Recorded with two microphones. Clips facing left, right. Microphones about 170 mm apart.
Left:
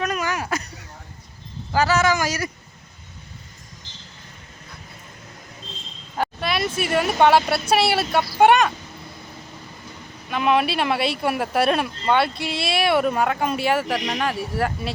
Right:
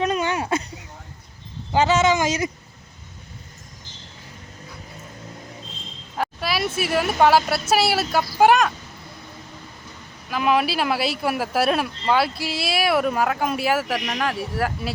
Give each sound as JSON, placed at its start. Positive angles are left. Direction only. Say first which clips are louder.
{"t": 0.0, "sound": "a sound", "louder": "right 3 dB", "side_deg": -25}
{"t": 1.7, "sound": "speech", "louder": "right 1 dB", "side_deg": -20}
{"t": 6.1, "sound": "speech", "louder": "left 1 dB", "side_deg": -5}
{"t": 10.2, "sound": "speech", "louder": "left 1 dB", "side_deg": 0}